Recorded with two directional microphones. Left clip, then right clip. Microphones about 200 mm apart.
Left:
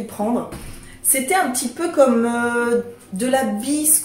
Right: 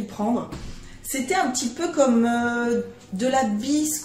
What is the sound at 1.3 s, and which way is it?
A woman's voice, 5° right (ahead or behind).